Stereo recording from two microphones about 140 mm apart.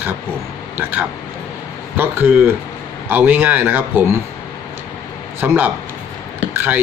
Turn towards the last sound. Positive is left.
turn(degrees=-15)  # may be behind; listen again after turning